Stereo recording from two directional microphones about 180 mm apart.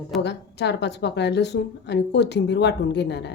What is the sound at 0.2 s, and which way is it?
A woman's voice, 70° left (ahead or behind).